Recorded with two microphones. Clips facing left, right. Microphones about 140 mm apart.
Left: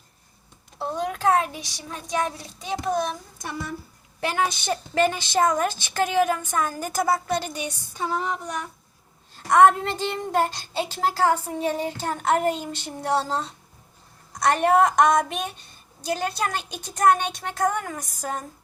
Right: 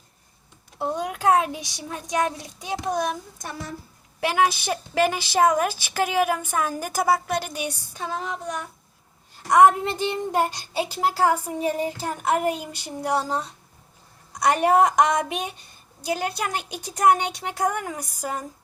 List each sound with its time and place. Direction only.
0.8 s speech: 15° right (ahead or behind)
4.2 s speech: 5° right (ahead or behind)
9.3 s speech: 15° right (ahead or behind)